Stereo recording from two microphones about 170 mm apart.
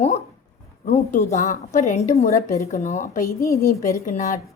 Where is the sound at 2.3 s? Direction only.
15° left (ahead or behind).